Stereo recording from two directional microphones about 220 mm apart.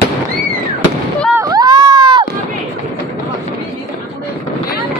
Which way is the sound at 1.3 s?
15° right (ahead or behind).